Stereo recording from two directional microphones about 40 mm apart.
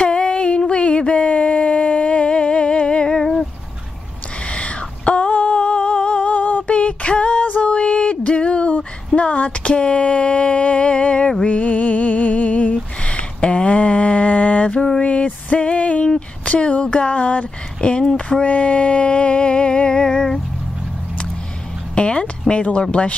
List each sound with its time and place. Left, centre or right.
0.0 s a sound: left
4.5 s humming: left
7.4 s music: left
7.7 s a sound: left
11.4 s music: left
12.7 s a sound: left
18.4 s music: left
21.9 s music: left
22.5 s speech: left